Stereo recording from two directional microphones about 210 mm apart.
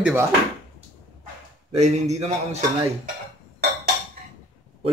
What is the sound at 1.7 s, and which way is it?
Speech, 35° right (ahead or behind).